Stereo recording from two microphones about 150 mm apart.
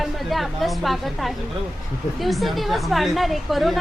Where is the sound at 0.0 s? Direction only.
Centre (ahead or behind).